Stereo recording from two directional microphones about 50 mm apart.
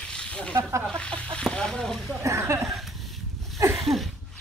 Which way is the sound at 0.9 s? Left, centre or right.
Left.